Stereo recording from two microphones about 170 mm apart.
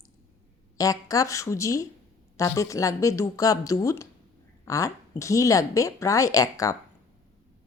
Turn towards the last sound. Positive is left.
turn(degrees=20)  # may be behind; listen again after turning